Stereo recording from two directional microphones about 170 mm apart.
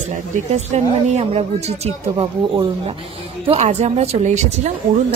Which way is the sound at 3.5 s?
40° right (ahead or behind).